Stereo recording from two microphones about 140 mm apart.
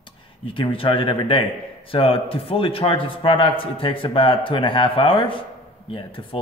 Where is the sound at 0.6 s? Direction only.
40° left (ahead or behind).